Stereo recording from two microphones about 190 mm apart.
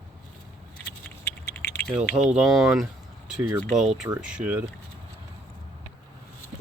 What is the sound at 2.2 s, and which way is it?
Speech, 5° right (ahead or behind).